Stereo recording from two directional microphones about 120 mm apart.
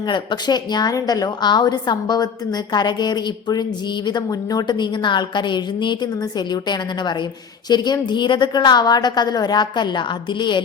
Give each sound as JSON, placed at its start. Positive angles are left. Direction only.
{"t": 0.1, "sound": "a woman's voice", "side_deg": 40}